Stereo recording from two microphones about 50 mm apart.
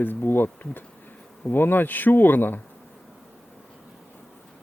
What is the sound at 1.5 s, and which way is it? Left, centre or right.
Speech, left.